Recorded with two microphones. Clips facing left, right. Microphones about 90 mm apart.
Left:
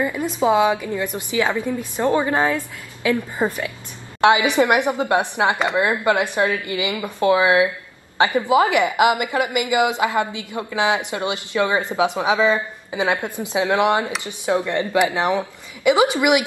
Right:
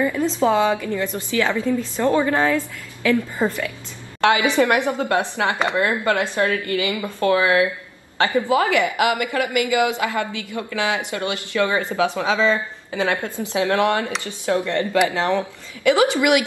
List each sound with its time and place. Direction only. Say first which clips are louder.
0.0 s a woman's voice: right 1 dB; 15° left (ahead or behind)